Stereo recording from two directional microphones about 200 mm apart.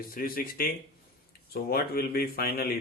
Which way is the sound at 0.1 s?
45° left (ahead or behind).